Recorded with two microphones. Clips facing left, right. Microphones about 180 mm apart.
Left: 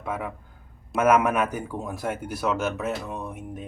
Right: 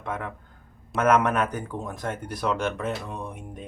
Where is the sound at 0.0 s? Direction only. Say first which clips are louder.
Left 1 dB; 5° left (ahead or behind).